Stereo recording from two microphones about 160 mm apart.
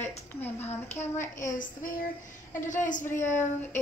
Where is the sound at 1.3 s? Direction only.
55° left (ahead or behind).